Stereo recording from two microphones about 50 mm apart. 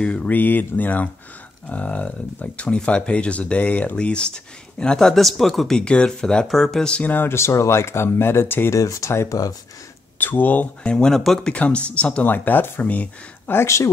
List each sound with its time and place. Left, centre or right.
0.0 s speech: left
0.3 s speech: left; by 5.8 s centre
5.8 s speech: centre
7.1 s speech: left
7.3 s speech: left
8.7 s speech: left
10.1 s speech: left
10.8 s speech: centre
11.5 s speech: left
12.3 s speech: left
12.8 s speech: left
13.5 s speech: left